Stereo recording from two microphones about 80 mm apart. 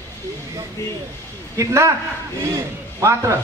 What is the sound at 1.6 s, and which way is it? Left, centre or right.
A man's voice, right.